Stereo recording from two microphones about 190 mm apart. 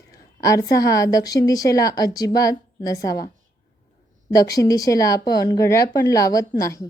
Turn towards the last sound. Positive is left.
turn(degrees=15)  # may be behind; listen again after turning